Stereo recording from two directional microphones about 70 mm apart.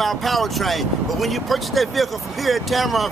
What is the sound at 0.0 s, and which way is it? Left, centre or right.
Speech, centre.